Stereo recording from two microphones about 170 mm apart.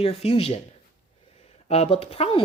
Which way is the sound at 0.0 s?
35° left (ahead or behind).